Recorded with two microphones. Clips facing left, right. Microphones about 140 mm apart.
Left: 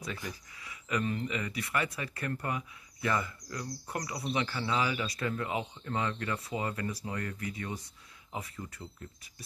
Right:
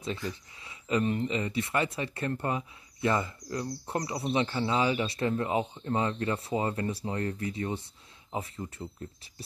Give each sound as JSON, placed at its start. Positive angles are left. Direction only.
{"t": 0.3, "sound": "speech", "side_deg": -25}